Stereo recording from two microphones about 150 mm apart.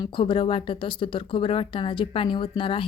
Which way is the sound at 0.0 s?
35° left (ahead or behind).